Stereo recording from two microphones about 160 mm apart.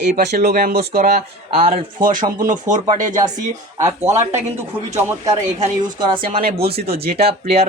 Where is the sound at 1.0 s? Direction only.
50° right (ahead or behind).